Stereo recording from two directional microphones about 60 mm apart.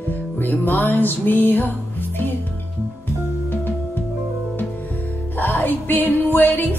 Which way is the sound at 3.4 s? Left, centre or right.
Left.